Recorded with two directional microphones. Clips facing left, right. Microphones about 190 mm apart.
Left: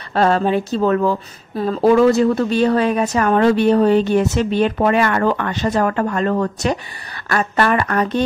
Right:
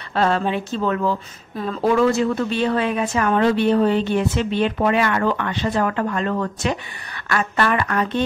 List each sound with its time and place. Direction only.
0.1 s a woman's voice: 40° left (ahead or behind)